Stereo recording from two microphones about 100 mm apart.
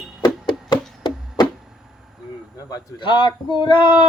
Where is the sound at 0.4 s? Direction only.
50° left (ahead or behind).